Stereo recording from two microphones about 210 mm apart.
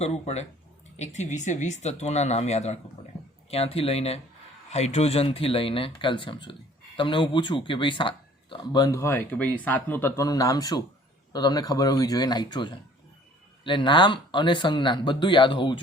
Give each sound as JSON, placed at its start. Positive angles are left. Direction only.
{"t": 0.0, "sound": "speech", "side_deg": 30}